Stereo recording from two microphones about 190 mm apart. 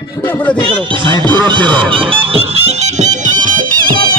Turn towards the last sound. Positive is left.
turn(degrees=-40)  # may be behind; listen again after turning